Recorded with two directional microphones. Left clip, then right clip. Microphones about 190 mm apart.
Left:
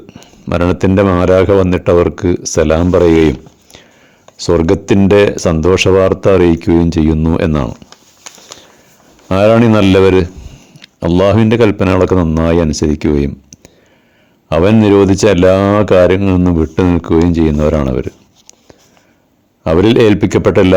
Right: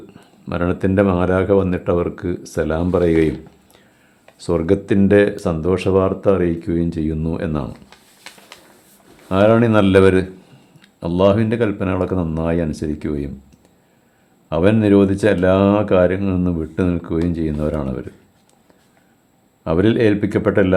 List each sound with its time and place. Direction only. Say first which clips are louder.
0.1 s a man's voice: left 10 dB; 35° left (ahead or behind)
14.5 s speech: left 6 dB; 40° left (ahead or behind)
19.6 s speech: left 7 dB; 40° left (ahead or behind)